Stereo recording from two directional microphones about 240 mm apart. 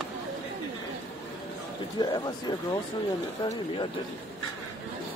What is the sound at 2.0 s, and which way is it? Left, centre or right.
Speech, centre.